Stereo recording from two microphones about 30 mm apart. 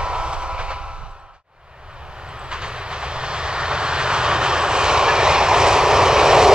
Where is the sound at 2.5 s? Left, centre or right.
Right.